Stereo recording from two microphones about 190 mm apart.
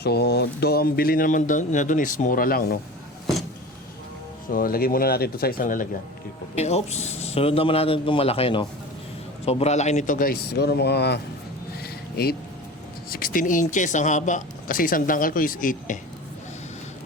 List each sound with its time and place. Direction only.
0.0 s speech: 60° left (ahead or behind)
4.5 s speech: 50° left (ahead or behind)
6.6 s a man's voice: 35° left (ahead or behind); by 11.2 s 60° left (ahead or behind)
11.8 s a sound: 55° left (ahead or behind)
13.1 s speech: 50° left (ahead or behind)